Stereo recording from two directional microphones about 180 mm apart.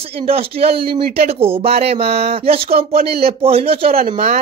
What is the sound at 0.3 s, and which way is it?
Speech, 35° right (ahead or behind).